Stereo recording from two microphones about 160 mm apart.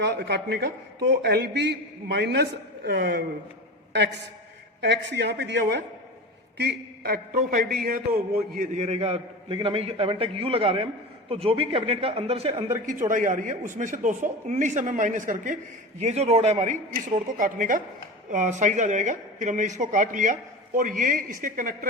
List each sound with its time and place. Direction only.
0.0 s a man's voice: 90° right
4.8 s a man's voice: 90° right; by 12.7 s 40° right (ahead or behind)
12.8 s speech: 55° right (ahead or behind)